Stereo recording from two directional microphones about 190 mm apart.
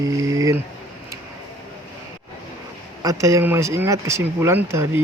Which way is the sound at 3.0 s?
15° right (ahead or behind).